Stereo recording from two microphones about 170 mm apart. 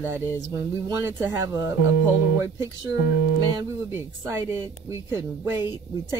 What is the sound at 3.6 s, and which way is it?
Speech, 15° right (ahead or behind).